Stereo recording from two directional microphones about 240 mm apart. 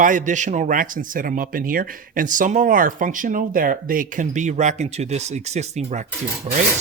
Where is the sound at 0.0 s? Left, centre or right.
Right.